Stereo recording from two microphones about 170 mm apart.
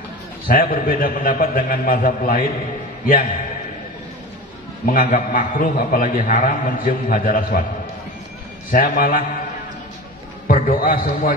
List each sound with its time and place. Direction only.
0.5 s a man's voice: 55° left (ahead or behind)
4.8 s a man's voice: 55° left (ahead or behind)
8.7 s a man's voice: 60° left (ahead or behind)
10.5 s a man's voice: 60° left (ahead or behind)